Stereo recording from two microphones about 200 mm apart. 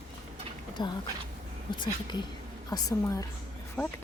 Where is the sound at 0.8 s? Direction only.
20° left (ahead or behind).